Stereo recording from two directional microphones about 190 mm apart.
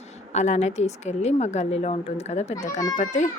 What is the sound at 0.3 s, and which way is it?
Speech, 35° left (ahead or behind).